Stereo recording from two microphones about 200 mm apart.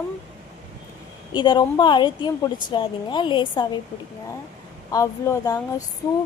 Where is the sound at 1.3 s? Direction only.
20° left (ahead or behind).